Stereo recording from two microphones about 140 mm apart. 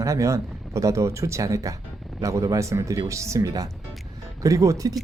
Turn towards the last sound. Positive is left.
turn(degrees=-25)  # may be behind; listen again after turning